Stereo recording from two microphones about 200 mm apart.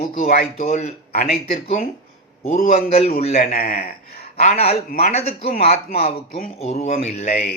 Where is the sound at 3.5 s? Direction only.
50° left (ahead or behind).